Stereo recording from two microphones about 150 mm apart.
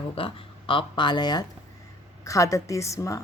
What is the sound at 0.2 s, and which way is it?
Speech, 35° left (ahead or behind).